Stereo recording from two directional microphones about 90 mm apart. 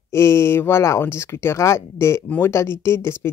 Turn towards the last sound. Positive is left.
turn(degrees=30)  # may be behind; listen again after turning